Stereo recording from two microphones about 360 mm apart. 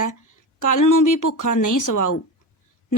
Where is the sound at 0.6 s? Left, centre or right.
Left.